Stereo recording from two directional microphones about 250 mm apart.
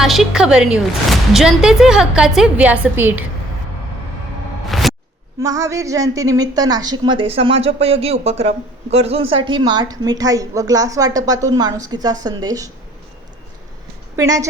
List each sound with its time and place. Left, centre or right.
0.0 s a woman's voice: centre
4.7 s music: centre
5.4 s a woman's voice: centre
14.2 s a woman's voice: centre